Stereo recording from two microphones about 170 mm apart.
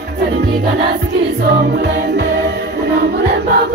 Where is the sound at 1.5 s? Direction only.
75° right (ahead or behind).